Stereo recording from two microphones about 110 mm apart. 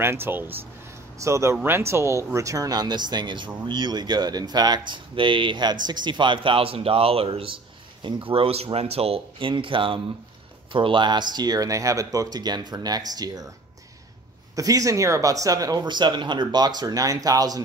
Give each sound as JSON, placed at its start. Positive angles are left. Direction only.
{"t": 0.0, "sound": "speech", "side_deg": -20}
{"t": 14.5, "sound": "speech", "side_deg": -30}